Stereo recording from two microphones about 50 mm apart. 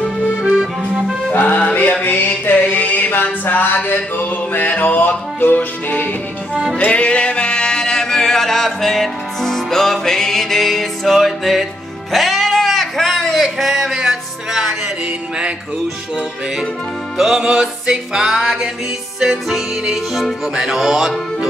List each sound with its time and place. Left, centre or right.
0.4 s accordion: centre
1.3 s music: left
6.5 s music: centre
6.8 s music: left; by 14.7 s centre
17.2 s music: centre